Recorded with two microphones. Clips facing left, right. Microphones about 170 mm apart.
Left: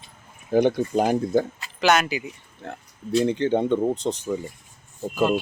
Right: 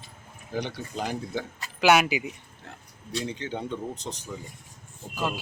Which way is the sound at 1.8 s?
10° right (ahead or behind).